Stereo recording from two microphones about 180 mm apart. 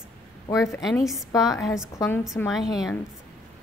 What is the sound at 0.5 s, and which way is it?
Speech, 15° left (ahead or behind).